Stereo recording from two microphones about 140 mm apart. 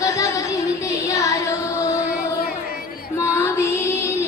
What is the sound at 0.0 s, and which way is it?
Female singing, 20° left (ahead or behind).